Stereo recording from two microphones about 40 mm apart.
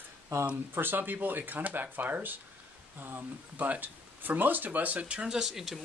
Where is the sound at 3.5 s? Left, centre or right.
Right.